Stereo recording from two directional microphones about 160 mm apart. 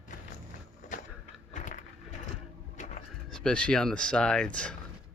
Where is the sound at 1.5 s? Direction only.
50° left (ahead or behind).